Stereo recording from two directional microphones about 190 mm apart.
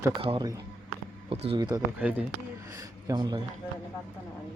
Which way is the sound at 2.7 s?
20° right (ahead or behind).